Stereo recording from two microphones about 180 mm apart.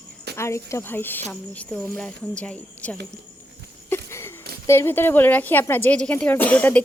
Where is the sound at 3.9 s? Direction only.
15° left (ahead or behind).